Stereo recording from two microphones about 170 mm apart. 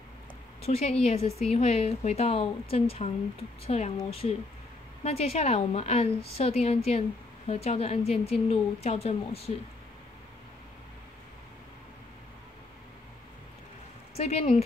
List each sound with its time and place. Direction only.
0.6 s a woman's voice: 40° left (ahead or behind)
14.1 s a woman's voice: 40° left (ahead or behind)